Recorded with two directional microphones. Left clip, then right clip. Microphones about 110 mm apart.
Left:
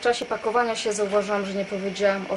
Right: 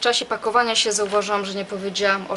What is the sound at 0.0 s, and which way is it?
Speech, 10° right (ahead or behind).